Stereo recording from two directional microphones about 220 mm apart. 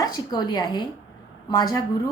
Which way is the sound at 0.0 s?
20° left (ahead or behind).